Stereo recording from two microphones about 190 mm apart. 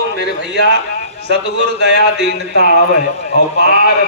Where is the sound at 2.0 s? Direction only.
60° left (ahead or behind).